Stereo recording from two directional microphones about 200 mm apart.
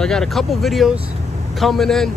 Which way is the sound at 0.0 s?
Centre (ahead or behind).